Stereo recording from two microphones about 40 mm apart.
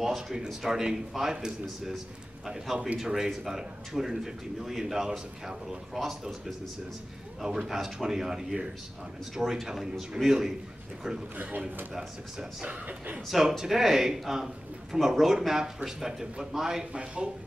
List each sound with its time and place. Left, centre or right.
0.0 s a man's voice: centre
3.0 s a man's voice: centre
13.3 s a man's voice: centre
16.1 s a man's voice: right
16.9 s a man's voice: right